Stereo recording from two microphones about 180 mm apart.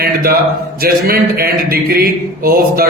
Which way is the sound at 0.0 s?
55° right (ahead or behind).